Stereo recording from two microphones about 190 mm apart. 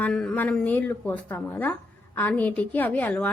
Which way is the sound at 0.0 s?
5° left (ahead or behind).